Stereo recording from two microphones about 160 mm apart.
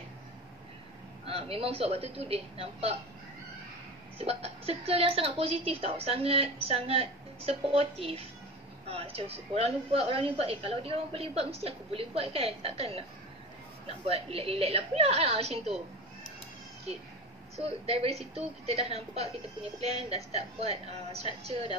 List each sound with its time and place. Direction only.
1.2 s a woman's voice: 40° right (ahead or behind)
4.2 s a woman's voice: 40° right (ahead or behind)
17.6 s a woman's voice: 40° right (ahead or behind)